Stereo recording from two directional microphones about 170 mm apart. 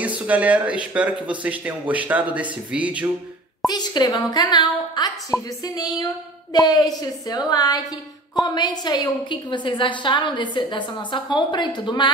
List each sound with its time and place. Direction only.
0.0 s speech: 10° right (ahead or behind)
3.6 s a woman's voice: 25° left (ahead or behind)